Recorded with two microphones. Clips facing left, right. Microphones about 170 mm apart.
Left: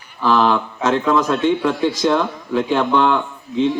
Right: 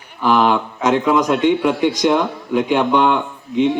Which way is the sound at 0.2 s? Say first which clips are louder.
Right 1 dB; 15° right (ahead or behind).